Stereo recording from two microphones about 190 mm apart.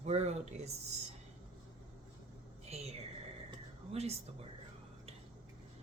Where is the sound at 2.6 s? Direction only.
35° right (ahead or behind).